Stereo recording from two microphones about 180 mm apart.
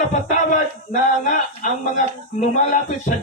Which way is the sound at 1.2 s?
45° left (ahead or behind).